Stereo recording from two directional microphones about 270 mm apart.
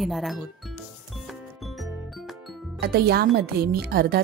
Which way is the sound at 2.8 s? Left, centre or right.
Right.